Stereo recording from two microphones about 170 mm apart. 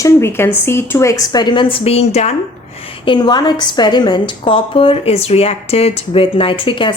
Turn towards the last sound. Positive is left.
turn(degrees=30)  # may be behind; listen again after turning